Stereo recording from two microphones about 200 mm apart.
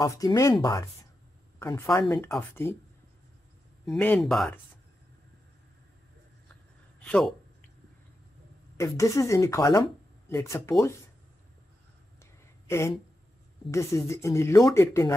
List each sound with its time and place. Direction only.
0.0 s speech: 15° left (ahead or behind)
3.8 s speech: 5° left (ahead or behind)
7.0 s speech: 5° left (ahead or behind)
8.7 s speech: 15° left (ahead or behind)
12.6 s speech: 15° left (ahead or behind)